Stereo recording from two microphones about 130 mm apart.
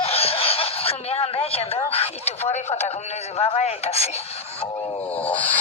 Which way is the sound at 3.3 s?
50° left (ahead or behind).